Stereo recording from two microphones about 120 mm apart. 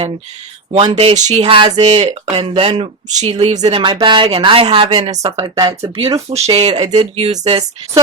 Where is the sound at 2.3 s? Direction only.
55° right (ahead or behind).